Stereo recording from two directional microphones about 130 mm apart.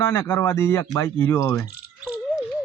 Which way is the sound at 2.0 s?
10° right (ahead or behind).